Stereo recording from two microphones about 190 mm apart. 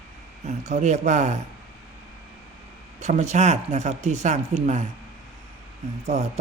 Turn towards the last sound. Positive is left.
turn(degrees=-35)  # may be behind; listen again after turning